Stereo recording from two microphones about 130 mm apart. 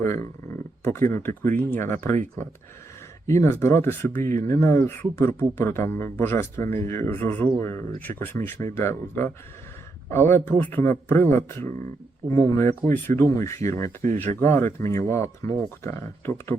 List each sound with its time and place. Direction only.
0.0 s speech: 20° left (ahead or behind)
3.2 s speech: 20° left (ahead or behind)